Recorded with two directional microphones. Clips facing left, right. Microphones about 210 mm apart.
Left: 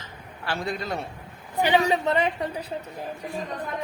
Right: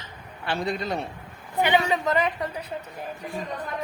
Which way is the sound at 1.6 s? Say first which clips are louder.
Left 1 dB; 30° left (ahead or behind).